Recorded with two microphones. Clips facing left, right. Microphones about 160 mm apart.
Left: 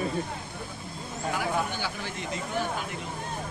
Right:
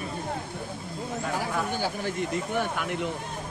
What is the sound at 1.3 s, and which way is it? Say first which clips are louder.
Speech: left 1 dB; 40° right (ahead or behind).